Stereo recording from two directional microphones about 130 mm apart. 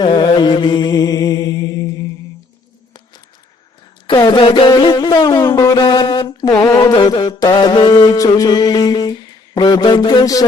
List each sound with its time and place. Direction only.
0.0 s mantra: 35° left (ahead or behind)
4.1 s music: 35° left (ahead or behind)
9.6 s a sound: 35° left (ahead or behind)